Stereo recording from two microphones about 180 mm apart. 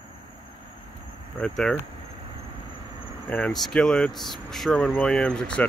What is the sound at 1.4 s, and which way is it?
Speech, 5° left (ahead or behind).